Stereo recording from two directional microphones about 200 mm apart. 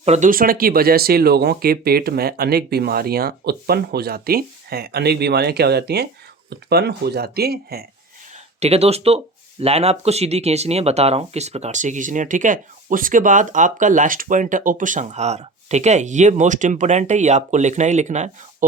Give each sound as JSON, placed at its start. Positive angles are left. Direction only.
{"t": 0.0, "sound": "speech", "side_deg": -35}
{"t": 8.6, "sound": "speech", "side_deg": -30}